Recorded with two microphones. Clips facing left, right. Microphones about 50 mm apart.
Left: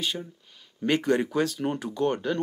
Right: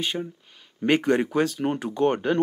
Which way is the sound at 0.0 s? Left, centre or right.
Right.